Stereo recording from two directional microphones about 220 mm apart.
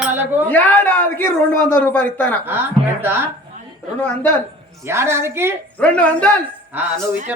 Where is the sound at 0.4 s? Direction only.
10° left (ahead or behind).